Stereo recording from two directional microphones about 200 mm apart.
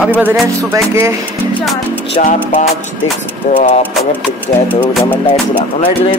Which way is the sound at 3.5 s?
35° left (ahead or behind).